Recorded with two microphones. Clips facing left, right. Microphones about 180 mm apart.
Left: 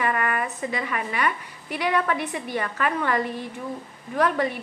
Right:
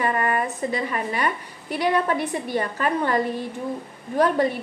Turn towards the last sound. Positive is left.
turn(degrees=-35)  # may be behind; listen again after turning